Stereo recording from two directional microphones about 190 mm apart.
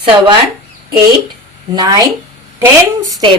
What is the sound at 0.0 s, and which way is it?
Speech, 25° right (ahead or behind).